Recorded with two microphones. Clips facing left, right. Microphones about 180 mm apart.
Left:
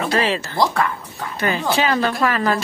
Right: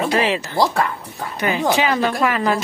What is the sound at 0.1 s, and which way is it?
A woman's voice, 15° right (ahead or behind).